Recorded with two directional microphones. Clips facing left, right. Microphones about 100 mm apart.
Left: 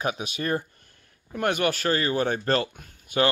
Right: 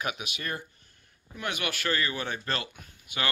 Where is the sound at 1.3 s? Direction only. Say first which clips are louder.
Left 9 dB; 50° left (ahead or behind).